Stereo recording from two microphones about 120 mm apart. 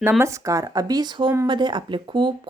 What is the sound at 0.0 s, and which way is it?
Speech, 20° right (ahead or behind).